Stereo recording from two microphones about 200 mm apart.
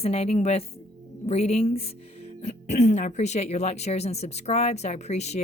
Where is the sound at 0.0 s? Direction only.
30° left (ahead or behind).